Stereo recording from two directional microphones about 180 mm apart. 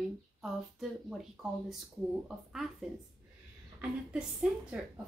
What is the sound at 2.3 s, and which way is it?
Speech, centre (ahead or behind).